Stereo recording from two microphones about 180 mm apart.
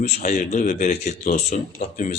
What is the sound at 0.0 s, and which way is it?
Speech, 45° left (ahead or behind).